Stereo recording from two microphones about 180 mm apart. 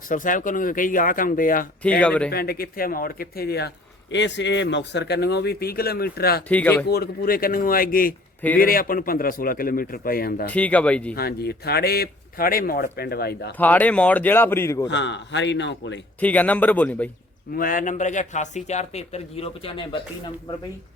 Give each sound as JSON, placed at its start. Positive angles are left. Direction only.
{"t": 0.1, "sound": "a man's voice", "side_deg": 45}
{"t": 2.0, "sound": "speech", "side_deg": 5}
{"t": 2.3, "sound": "a man's voice", "side_deg": 60}
{"t": 4.1, "sound": "a man's voice", "side_deg": 80}
{"t": 6.5, "sound": "speech", "side_deg": 10}
{"t": 6.8, "sound": "a man's voice", "side_deg": 60}
{"t": 10.5, "sound": "speech", "side_deg": 10}
{"t": 11.1, "sound": "a man's voice", "side_deg": 60}
{"t": 13.6, "sound": "speech", "side_deg": 10}
{"t": 14.8, "sound": "a man's voice", "side_deg": 80}
{"t": 16.2, "sound": "speech", "side_deg": 10}
{"t": 17.5, "sound": "speech", "side_deg": 50}